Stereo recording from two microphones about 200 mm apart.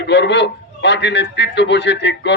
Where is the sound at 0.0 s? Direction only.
60° left (ahead or behind).